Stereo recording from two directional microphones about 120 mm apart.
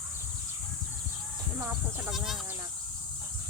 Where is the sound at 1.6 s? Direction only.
20° right (ahead or behind).